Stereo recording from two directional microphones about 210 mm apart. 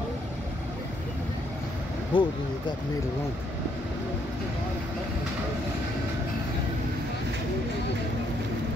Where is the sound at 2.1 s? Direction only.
20° left (ahead or behind).